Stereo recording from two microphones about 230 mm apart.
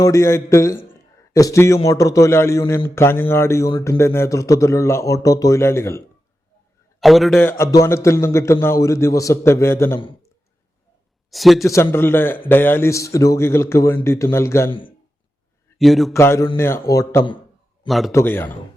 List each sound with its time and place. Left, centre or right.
0.0 s a man's voice: centre
7.0 s a man's voice: centre
10.0 s clicking: left
11.3 s a man's voice: centre
11.6 s a man's voice: centre
15.8 s a man's voice: centre
16.1 s a man's voice: centre
17.8 s a man's voice: centre
18.1 s a man's voice: centre